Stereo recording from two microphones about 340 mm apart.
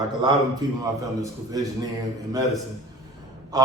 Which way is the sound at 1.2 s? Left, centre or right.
Centre.